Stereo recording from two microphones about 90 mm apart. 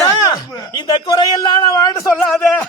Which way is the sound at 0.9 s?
50° left (ahead or behind).